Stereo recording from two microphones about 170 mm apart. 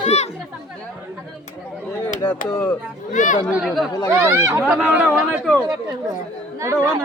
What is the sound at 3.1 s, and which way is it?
Speech, 50° left (ahead or behind).